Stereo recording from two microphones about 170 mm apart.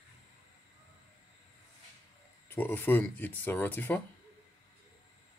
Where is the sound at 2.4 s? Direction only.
10° left (ahead or behind).